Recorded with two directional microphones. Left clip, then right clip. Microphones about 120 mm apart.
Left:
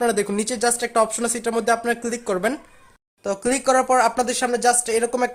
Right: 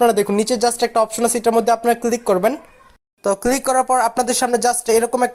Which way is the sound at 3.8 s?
30° right (ahead or behind).